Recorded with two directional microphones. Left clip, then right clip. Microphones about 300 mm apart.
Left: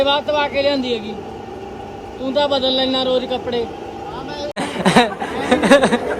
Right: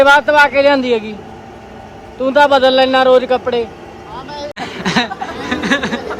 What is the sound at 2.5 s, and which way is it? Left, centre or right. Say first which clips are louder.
Speech: right 7 dB; centre.